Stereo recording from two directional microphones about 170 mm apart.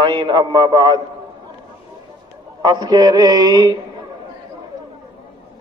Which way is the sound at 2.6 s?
25° right (ahead or behind).